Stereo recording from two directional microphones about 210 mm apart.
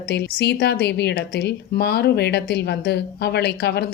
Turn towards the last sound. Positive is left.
turn(degrees=50)  # may be behind; listen again after turning